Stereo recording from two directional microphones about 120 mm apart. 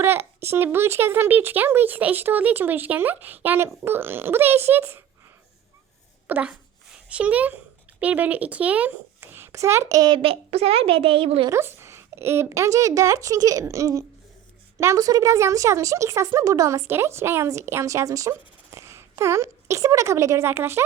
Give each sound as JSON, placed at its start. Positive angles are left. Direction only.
{"t": 0.0, "sound": "a sound", "side_deg": -20}
{"t": 0.5, "sound": "speech", "side_deg": -20}
{"t": 6.2, "sound": "a child's voice", "side_deg": -10}
{"t": 10.2, "sound": "a woman's voice", "side_deg": -55}
{"t": 11.4, "sound": "speech", "side_deg": -20}